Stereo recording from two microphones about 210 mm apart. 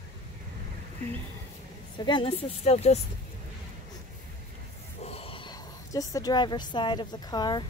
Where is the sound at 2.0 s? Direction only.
20° left (ahead or behind).